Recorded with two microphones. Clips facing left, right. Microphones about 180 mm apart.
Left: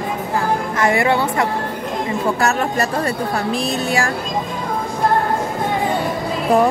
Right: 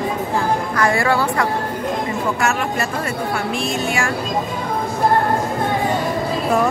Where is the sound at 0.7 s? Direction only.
20° left (ahead or behind).